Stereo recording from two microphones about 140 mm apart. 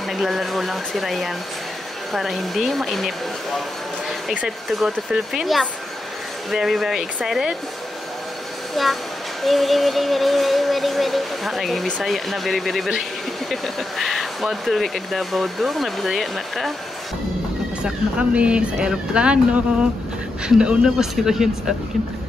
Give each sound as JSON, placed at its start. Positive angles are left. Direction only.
{"t": 0.2, "sound": "speech", "side_deg": 0}
{"t": 4.3, "sound": "speech", "side_deg": -5}
{"t": 8.8, "sound": "speech", "side_deg": 0}
{"t": 17.8, "sound": "speech", "side_deg": -10}
{"t": 20.4, "sound": "speech", "side_deg": -5}